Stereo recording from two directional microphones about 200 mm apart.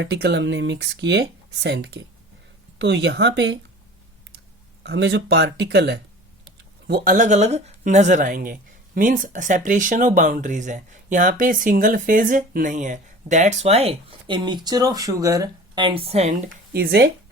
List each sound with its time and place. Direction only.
0.0 s speech: 55° right (ahead or behind)
4.8 s speech: 60° right (ahead or behind); by 16.3 s 30° right (ahead or behind)
16.7 s speech: 50° right (ahead or behind)